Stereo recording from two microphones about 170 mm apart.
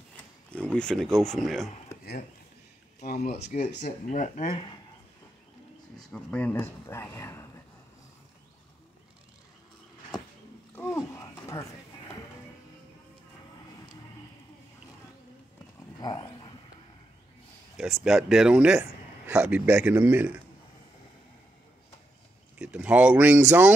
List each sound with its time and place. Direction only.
0.5 s a sound: 5° left (ahead or behind)
1.2 s a man's voice: centre (ahead or behind)
3.0 s speech: 60° left (ahead or behind)
3.8 s speech: 45° left (ahead or behind)
5.9 s speech: 5° left (ahead or behind)
10.7 s a sound: 15° left (ahead or behind)
16.0 s dog: 25° left (ahead or behind)
17.7 s a man's voice: centre (ahead or behind)
22.6 s speech: 5° right (ahead or behind)